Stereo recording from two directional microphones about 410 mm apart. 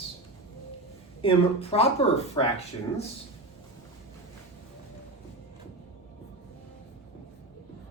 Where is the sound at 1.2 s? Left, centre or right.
Centre.